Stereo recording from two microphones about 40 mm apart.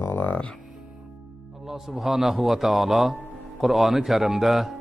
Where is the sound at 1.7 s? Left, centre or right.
Centre.